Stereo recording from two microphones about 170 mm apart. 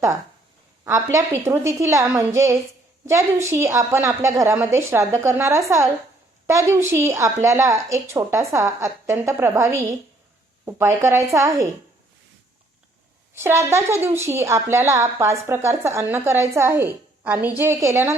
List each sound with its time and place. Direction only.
0.9 s a woman's voice: 15° right (ahead or behind)
13.3 s a woman's voice: 15° right (ahead or behind)